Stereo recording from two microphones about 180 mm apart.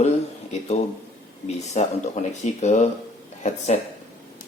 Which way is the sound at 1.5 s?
40° left (ahead or behind).